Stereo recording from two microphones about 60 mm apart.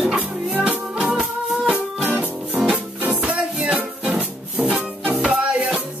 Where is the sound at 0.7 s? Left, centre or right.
Right.